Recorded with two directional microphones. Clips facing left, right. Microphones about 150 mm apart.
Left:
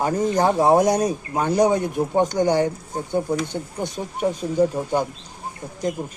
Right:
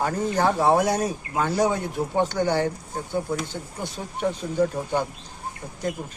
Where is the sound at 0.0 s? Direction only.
15° left (ahead or behind).